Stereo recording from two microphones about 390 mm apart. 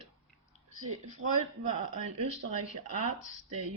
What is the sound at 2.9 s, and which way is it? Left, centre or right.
Speech, centre.